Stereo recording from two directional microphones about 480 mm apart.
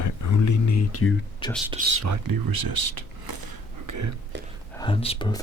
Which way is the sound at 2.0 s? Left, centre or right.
Right.